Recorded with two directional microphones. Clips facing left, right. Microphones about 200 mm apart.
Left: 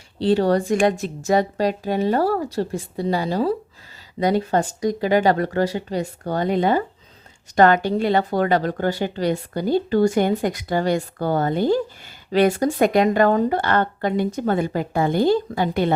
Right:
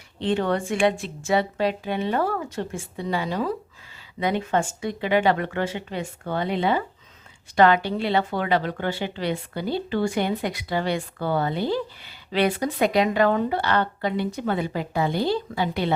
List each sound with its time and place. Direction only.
0.2 s a woman's voice: 35° left (ahead or behind)